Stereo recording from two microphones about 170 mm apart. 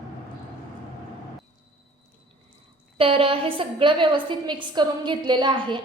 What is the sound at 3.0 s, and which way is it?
A woman's voice, 35° right (ahead or behind).